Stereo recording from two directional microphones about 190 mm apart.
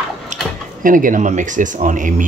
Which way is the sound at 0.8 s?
45° right (ahead or behind).